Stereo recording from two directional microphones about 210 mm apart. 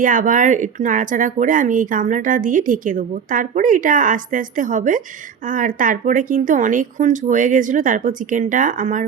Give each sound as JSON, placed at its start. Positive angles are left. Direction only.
{"t": 0.0, "sound": "speech", "side_deg": -40}